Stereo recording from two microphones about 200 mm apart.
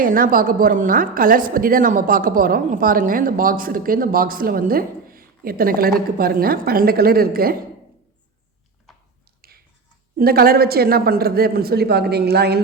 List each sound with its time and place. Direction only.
0.0 s a woman's voice: 45° right (ahead or behind)
9.4 s finger snapping: 45° right (ahead or behind)
10.2 s a woman's voice: 50° right (ahead or behind)